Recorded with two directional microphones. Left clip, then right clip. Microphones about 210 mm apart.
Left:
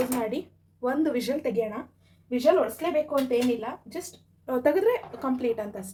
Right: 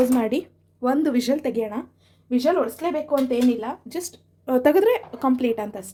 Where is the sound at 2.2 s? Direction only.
55° right (ahead or behind).